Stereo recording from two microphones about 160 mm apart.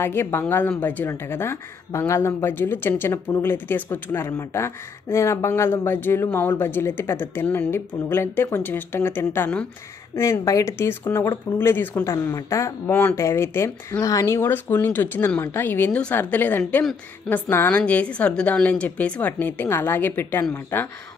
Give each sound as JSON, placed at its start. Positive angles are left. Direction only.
{"t": 0.0, "sound": "a woman's voice", "side_deg": 15}